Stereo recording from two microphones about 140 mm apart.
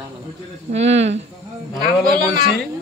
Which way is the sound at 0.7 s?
50° right (ahead or behind).